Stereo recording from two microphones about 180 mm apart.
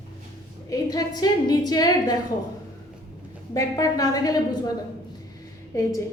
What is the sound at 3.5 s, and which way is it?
A woman's voice, 20° left (ahead or behind).